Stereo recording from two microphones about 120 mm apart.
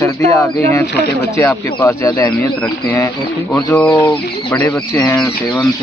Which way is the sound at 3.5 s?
10° left (ahead or behind).